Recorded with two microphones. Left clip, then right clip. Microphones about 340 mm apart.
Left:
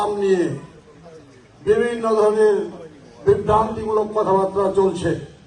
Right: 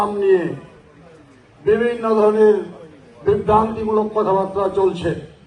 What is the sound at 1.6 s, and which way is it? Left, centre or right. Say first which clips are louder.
A man's voice: right 1 dB; right.